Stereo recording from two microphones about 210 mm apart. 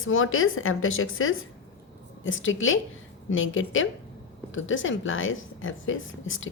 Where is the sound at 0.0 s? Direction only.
75° left (ahead or behind).